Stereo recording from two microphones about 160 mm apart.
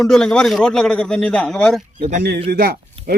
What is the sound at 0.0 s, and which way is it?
A man's voice, 5° left (ahead or behind).